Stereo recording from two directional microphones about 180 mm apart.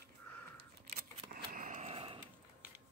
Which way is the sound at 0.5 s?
60° right (ahead or behind).